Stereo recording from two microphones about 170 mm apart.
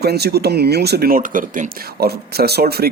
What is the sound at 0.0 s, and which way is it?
Speech, 70° right (ahead or behind).